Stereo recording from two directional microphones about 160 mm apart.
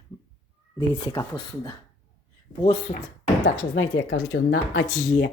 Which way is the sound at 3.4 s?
75° left (ahead or behind).